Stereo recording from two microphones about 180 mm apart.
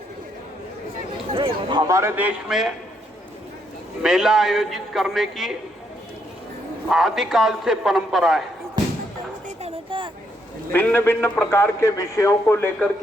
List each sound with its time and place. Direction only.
1.4 s a man's voice: 25° right (ahead or behind); by 2.7 s centre (ahead or behind)
4.0 s a man's voice: centre (ahead or behind)
6.9 s a man's voice: centre (ahead or behind)
9.6 s a sound: 30° right (ahead or behind)
10.7 s a man's voice: 10° left (ahead or behind)